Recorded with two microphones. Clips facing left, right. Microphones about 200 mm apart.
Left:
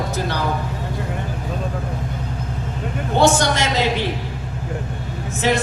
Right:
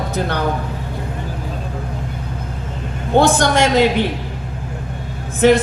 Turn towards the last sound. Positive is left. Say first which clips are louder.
# right 8 dB
turn(degrees=-55)  # may be behind; listen again after turning